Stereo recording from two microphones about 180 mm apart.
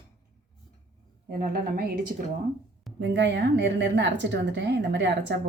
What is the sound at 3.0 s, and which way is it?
Speech, 75° right (ahead or behind).